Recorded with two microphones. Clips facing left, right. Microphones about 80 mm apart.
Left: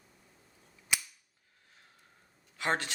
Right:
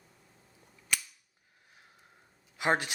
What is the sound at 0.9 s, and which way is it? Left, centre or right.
Cap gun, centre.